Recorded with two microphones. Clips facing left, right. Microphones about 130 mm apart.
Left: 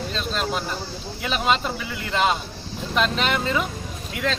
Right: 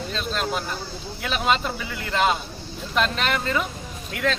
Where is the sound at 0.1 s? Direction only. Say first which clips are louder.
Right 1 dB; centre (ahead or behind).